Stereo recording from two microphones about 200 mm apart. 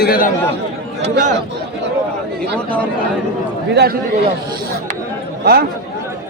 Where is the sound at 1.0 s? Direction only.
40° right (ahead or behind).